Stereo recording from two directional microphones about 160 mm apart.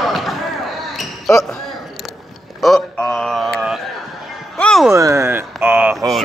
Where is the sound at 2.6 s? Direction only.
Centre (ahead or behind).